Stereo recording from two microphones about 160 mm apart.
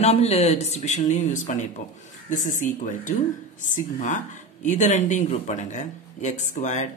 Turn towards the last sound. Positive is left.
turn(degrees=50)  # may be behind; listen again after turning